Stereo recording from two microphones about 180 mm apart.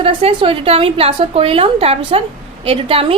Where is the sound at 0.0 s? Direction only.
30° right (ahead or behind).